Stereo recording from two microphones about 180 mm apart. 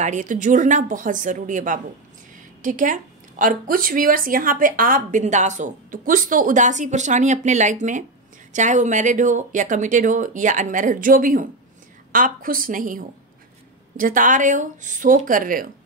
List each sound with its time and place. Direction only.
0.0 s speech: 45° right (ahead or behind)